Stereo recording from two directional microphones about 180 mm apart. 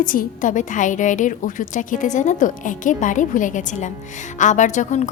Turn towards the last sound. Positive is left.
turn(degrees=40)  # may be behind; listen again after turning